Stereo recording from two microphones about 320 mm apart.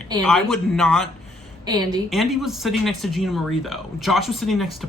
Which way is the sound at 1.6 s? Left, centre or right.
Centre.